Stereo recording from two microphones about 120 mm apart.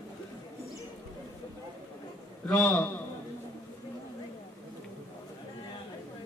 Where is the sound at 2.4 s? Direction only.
10° left (ahead or behind).